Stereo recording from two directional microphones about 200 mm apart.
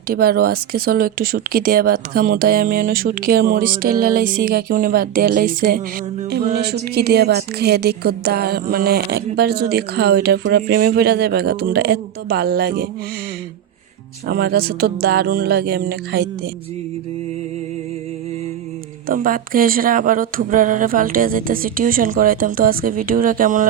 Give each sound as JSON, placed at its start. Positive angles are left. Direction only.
{"t": 0.1, "sound": "a woman's voice", "side_deg": -50}
{"t": 14.3, "sound": "a woman's voice", "side_deg": -50}
{"t": 19.0, "sound": "a woman's voice", "side_deg": -45}